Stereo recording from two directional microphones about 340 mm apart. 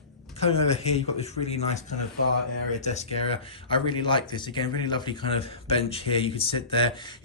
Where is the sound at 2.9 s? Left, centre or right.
Centre.